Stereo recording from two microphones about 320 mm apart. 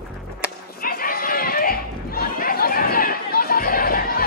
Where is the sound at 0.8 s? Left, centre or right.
Left.